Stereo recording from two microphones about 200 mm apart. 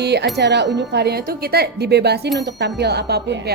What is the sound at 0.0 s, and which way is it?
Speech, 55° right (ahead or behind).